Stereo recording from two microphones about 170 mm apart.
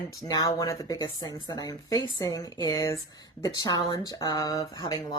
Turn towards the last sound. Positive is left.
turn(degrees=20)  # may be behind; listen again after turning